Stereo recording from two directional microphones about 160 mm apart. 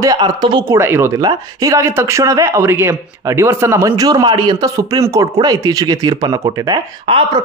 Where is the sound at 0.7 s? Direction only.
15° right (ahead or behind).